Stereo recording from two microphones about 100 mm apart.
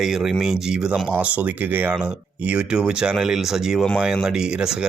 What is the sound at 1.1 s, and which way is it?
Speech, 15° right (ahead or behind).